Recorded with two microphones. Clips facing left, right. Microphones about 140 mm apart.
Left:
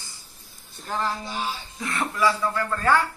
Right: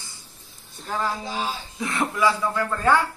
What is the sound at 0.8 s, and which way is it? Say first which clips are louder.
Speech: right 1 dB; centre (ahead or behind).